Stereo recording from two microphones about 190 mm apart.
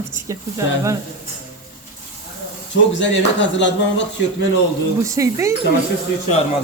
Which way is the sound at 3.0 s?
70° left (ahead or behind).